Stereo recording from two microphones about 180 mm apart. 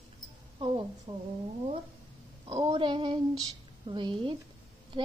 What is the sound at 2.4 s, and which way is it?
A child's voice, 30° right (ahead or behind).